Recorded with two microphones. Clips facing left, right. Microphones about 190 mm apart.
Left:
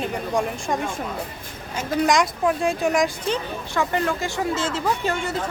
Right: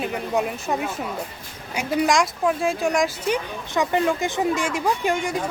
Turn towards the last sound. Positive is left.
turn(degrees=-15)  # may be behind; listen again after turning